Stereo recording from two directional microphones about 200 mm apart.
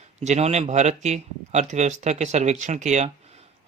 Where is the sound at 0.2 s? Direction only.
35° right (ahead or behind).